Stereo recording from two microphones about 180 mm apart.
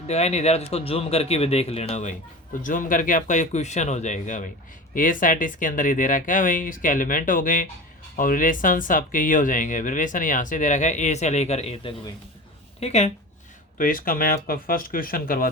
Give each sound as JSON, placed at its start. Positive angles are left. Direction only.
{"t": 0.1, "sound": "speech", "side_deg": 35}
{"t": 13.7, "sound": "speech", "side_deg": 50}